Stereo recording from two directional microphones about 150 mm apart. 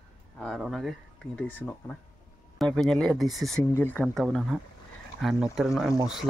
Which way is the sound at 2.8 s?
Centre (ahead or behind).